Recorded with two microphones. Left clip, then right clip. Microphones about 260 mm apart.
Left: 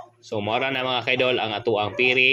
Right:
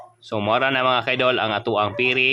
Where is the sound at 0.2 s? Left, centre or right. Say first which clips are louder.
Right 4 dB; centre.